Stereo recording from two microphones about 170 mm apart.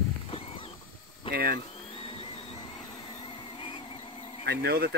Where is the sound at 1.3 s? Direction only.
60° right (ahead or behind).